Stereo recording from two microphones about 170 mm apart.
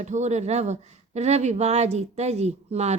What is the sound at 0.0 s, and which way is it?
A woman's voice, 45° right (ahead or behind).